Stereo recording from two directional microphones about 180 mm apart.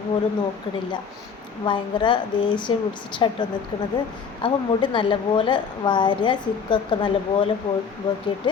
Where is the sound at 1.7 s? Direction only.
25° left (ahead or behind).